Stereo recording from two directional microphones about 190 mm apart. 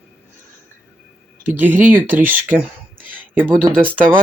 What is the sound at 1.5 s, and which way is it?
Speech, 10° right (ahead or behind).